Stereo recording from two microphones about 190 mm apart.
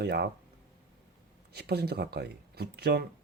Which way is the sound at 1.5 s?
55° right (ahead or behind).